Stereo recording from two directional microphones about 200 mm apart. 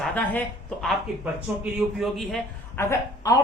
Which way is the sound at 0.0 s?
10° left (ahead or behind).